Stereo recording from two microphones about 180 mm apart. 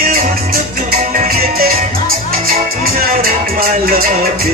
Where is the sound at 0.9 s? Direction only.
55° right (ahead or behind).